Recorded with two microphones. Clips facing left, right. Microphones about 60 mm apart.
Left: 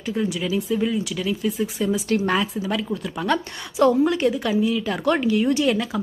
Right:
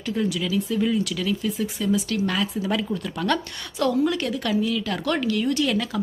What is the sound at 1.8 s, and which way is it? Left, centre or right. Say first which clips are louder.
Speech: left 2 dB; left.